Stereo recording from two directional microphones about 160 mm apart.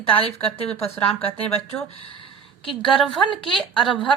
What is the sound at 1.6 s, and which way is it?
Speech, 35° left (ahead or behind).